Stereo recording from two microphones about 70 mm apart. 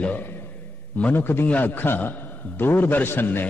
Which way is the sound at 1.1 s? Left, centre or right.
Left.